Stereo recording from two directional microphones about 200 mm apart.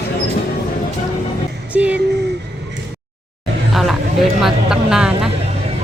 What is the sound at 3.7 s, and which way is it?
Chatter, centre (ahead or behind).